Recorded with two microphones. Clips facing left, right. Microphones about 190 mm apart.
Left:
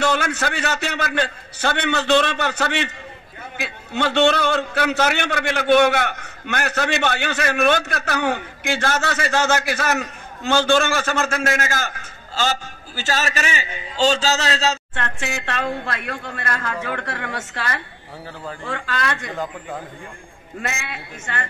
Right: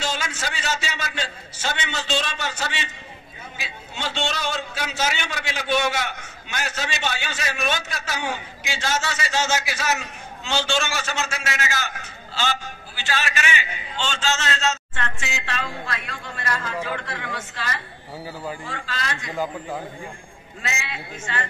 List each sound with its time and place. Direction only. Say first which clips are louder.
0.0 s a man's voice: left 8 dB; 60° left (ahead or behind); by 14.8 s 35° left (ahead or behind)
15.0 s a man's voice: left 4 dB; 55° left (ahead or behind)
18.2 s speech: right 1 dB; 10° right (ahead or behind)
18.7 s a man's voice: left 6 dB; 60° left (ahead or behind)
19.3 s a man's voice: right 1 dB; 5° right (ahead or behind)
20.6 s a man's voice: left 2 dB; 55° left (ahead or behind)